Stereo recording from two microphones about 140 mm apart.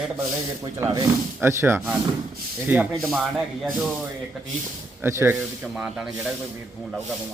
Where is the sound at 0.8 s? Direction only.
20° right (ahead or behind).